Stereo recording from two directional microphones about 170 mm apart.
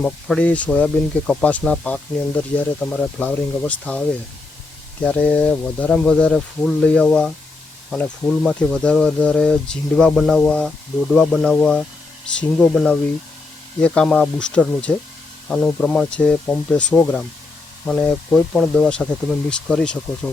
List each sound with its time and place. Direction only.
0.0 s speech: 5° left (ahead or behind)
5.0 s speech: 5° left (ahead or behind)